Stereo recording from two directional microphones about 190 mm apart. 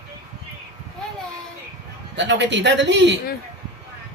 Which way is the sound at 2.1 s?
70° right (ahead or behind).